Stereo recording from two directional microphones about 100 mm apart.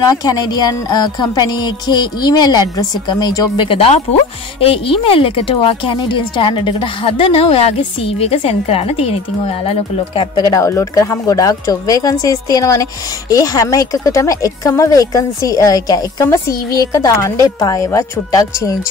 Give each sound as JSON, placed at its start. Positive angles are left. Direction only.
{"t": 0.2, "sound": "speech", "side_deg": 40}
{"t": 3.6, "sound": "speech", "side_deg": 75}
{"t": 8.2, "sound": "speech", "side_deg": 90}
{"t": 10.3, "sound": "speech", "side_deg": 35}